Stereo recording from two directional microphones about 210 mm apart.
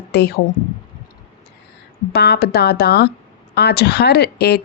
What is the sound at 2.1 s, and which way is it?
A woman's voice, 50° left (ahead or behind).